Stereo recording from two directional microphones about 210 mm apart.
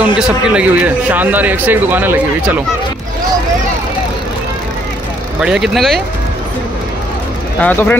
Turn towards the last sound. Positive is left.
turn(degrees=5)  # may be behind; listen again after turning